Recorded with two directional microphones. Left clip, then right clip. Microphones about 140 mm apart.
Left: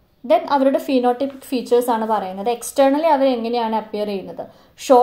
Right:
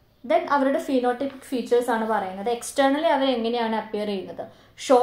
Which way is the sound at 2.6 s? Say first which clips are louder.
Left 6 dB; 10° left (ahead or behind).